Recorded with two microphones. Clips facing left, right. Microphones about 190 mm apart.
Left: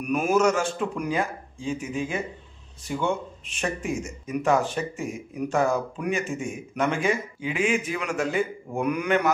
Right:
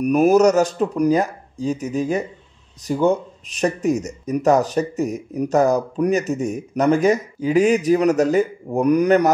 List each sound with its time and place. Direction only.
0.0 s speech: 40° right (ahead or behind)